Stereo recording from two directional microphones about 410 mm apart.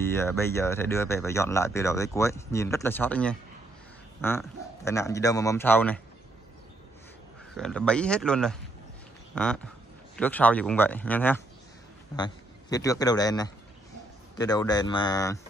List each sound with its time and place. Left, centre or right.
0.1 s speech: centre
7.5 s a man's voice: centre